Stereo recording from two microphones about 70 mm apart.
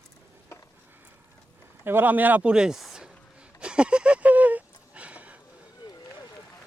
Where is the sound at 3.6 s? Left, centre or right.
Centre.